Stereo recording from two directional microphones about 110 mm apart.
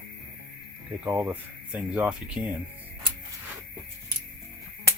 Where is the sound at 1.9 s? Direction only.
10° right (ahead or behind).